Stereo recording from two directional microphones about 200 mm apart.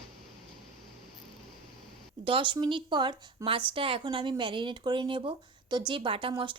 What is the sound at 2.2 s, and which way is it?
Speech, 25° right (ahead or behind).